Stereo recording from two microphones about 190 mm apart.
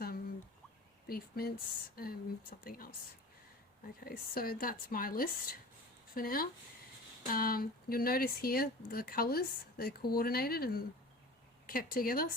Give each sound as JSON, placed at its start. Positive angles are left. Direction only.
{"t": 1.0, "sound": "speech", "side_deg": 50}
{"t": 4.0, "sound": "speech", "side_deg": 50}